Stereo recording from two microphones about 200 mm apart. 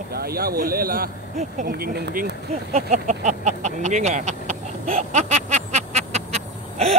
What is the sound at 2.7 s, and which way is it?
Speech, 35° right (ahead or behind).